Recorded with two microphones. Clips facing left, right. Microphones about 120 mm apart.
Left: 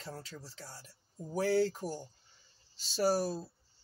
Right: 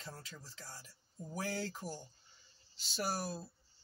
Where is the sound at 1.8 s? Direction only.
90° left.